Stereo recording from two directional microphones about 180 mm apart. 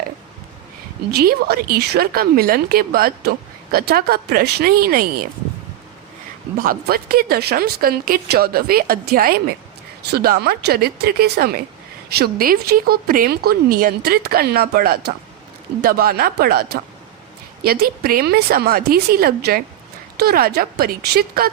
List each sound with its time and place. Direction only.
1.1 s a woman's voice: 60° right (ahead or behind)
6.6 s a woman's voice: 55° right (ahead or behind)